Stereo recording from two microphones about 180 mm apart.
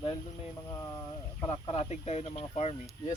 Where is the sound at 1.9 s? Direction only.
35° left (ahead or behind).